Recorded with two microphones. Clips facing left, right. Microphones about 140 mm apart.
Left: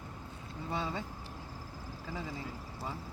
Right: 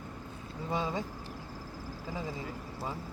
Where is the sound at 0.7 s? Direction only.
15° right (ahead or behind).